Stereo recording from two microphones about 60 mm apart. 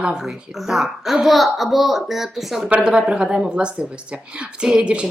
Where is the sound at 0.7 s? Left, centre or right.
Centre.